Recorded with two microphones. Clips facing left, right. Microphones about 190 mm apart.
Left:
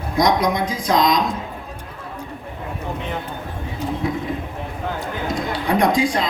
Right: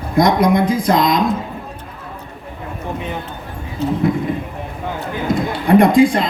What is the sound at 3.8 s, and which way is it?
Speech, 15° left (ahead or behind).